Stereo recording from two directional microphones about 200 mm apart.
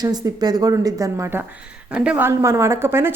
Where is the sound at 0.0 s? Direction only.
20° right (ahead or behind).